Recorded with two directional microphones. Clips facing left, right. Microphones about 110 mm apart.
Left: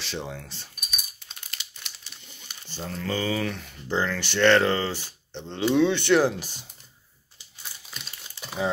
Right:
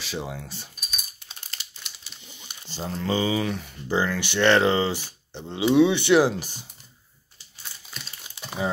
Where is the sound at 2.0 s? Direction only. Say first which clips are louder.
Right 1 dB; 5° right (ahead or behind).